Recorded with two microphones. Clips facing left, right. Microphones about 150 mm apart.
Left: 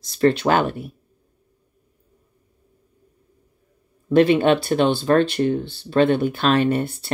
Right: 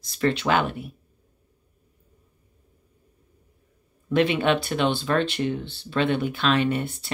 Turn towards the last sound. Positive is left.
turn(degrees=40)  # may be behind; listen again after turning